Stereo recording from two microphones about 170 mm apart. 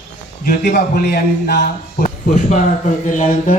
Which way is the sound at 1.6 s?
50° left (ahead or behind).